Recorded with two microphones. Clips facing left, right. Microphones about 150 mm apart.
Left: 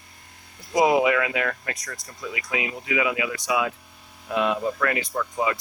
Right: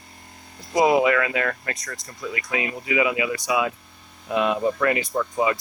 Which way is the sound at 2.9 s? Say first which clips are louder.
Right 3 dB; 5° right (ahead or behind).